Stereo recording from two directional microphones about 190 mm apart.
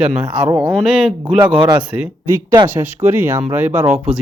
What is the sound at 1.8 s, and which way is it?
Speech, 5° right (ahead or behind).